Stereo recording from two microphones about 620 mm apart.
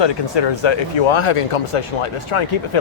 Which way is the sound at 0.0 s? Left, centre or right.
Left.